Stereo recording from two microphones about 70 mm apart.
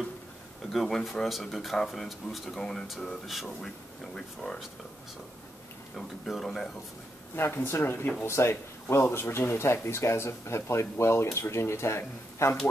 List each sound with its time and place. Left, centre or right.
0.7 s speech: centre
5.9 s speech: centre
7.3 s speech: left